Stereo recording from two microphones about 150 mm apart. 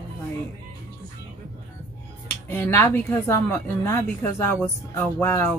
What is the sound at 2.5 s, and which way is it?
A woman's voice, 15° left (ahead or behind).